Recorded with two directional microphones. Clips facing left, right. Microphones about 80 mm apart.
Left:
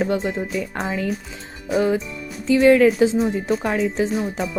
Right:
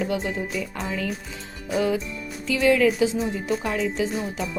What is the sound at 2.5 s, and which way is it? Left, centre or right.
Speech, left.